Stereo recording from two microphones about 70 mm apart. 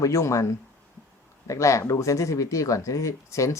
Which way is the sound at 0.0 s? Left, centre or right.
Left.